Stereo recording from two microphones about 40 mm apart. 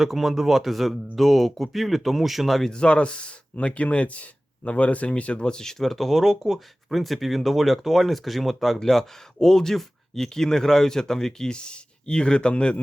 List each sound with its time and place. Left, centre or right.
0.0 s speech: centre
2.6 s speech: left